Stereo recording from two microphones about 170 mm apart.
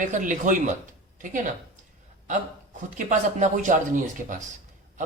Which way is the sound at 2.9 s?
45° right (ahead or behind).